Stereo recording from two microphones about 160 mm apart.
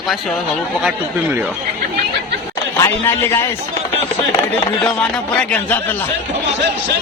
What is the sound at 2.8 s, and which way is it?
Speech, 15° left (ahead or behind).